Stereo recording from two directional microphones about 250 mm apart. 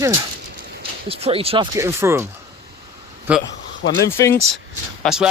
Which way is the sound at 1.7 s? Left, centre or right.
Centre.